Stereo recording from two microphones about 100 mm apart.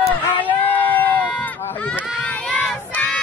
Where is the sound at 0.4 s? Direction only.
15° left (ahead or behind).